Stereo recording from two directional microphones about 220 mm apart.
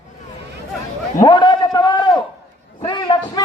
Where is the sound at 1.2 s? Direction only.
20° left (ahead or behind).